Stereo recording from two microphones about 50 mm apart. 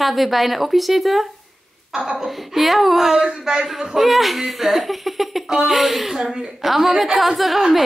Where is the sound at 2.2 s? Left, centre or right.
Centre.